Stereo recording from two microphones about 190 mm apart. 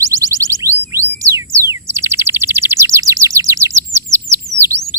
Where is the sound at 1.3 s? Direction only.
15° right (ahead or behind).